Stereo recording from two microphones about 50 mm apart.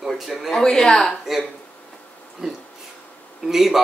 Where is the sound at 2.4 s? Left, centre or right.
Centre.